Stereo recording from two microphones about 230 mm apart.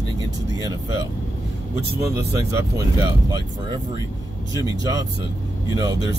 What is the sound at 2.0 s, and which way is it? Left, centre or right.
Speech, centre.